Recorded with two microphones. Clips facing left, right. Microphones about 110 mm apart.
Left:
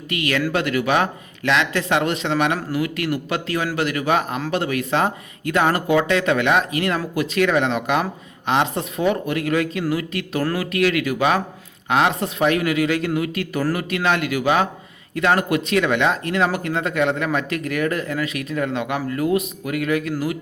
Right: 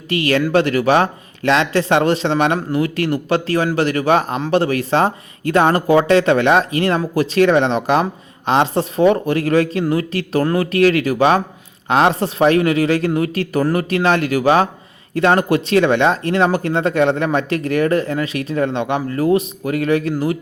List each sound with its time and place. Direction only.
0.1 s speech: 30° right (ahead or behind)